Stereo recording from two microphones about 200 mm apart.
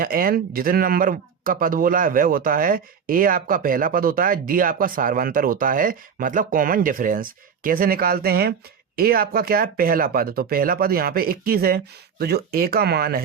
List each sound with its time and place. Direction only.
0.0 s speech: 45° right (ahead or behind)